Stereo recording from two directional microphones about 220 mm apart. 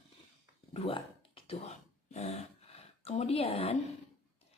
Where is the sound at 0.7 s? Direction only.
25° left (ahead or behind).